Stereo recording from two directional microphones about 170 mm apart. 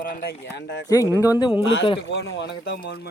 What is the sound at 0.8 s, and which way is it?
Speech, 20° left (ahead or behind).